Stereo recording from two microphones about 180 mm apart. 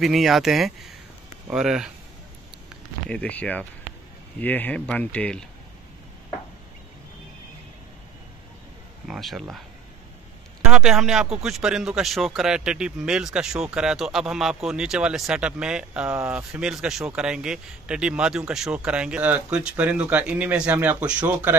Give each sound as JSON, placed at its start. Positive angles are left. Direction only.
{"t": 0.0, "sound": "speech", "side_deg": 0}
{"t": 3.1, "sound": "speech", "side_deg": 5}
{"t": 9.0, "sound": "speech", "side_deg": 0}
{"t": 10.6, "sound": "speech", "side_deg": -5}